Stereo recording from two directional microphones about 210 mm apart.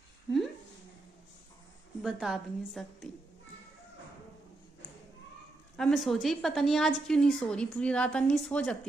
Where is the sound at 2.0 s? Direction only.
Centre (ahead or behind).